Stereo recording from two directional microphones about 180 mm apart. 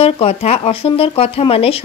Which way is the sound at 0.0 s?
35° left (ahead or behind).